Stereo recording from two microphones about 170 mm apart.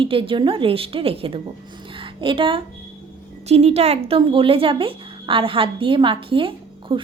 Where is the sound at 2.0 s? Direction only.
30° right (ahead or behind).